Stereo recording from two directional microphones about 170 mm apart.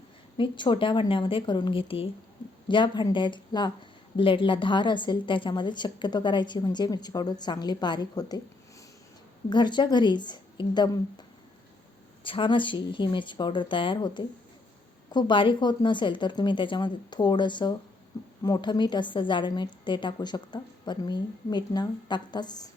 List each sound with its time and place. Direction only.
0.3 s a woman's voice: 25° left (ahead or behind)
9.5 s a woman's voice: 25° left (ahead or behind)
12.2 s a woman's voice: 30° left (ahead or behind)